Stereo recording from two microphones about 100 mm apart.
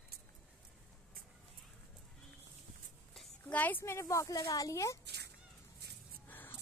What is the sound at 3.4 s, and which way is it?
Speech, 15° left (ahead or behind).